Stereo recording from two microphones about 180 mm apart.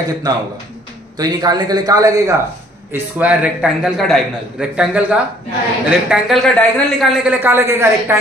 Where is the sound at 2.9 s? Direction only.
10° right (ahead or behind).